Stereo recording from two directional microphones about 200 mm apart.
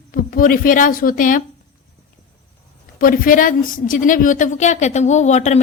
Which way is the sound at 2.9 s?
45° left (ahead or behind).